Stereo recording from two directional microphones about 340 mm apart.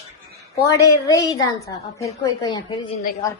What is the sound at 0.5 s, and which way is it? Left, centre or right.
A woman's voice, centre.